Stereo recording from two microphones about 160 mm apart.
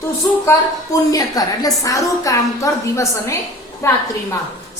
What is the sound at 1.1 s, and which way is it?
A woman's voice, 20° left (ahead or behind).